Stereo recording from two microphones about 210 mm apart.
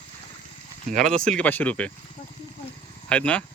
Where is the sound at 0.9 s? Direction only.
35° right (ahead or behind).